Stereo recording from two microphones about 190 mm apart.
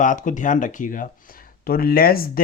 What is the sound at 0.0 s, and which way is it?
Speech, 40° left (ahead or behind).